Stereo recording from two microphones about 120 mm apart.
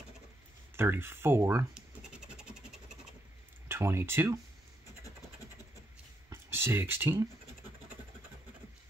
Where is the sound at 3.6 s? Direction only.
20° right (ahead or behind).